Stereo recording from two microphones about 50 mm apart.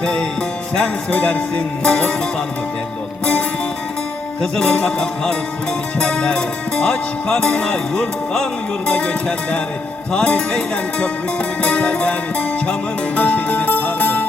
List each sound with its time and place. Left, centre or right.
0.0 s speech: centre
0.8 s music: left
1.8 s speech: centre
4.5 s speech: centre
8.9 s music: left
10.1 s speech: centre
11.6 s music: left